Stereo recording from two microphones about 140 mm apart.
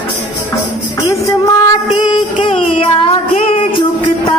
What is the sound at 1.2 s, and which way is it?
Female singing, 25° left (ahead or behind).